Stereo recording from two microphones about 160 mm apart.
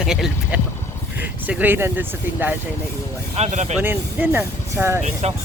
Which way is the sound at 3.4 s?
45° right (ahead or behind).